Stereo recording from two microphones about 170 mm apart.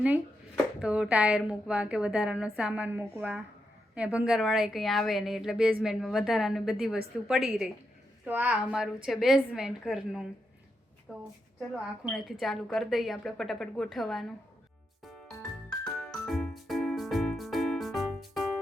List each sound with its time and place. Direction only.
0.8 s a woman's voice: 5° right (ahead or behind)
15.8 s music: 5° left (ahead or behind)